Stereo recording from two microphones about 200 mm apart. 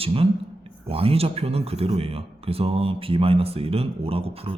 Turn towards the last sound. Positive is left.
turn(degrees=-30)  # may be behind; listen again after turning